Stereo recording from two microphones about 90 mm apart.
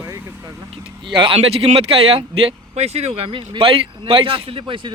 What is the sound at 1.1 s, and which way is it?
Speech, 80° right.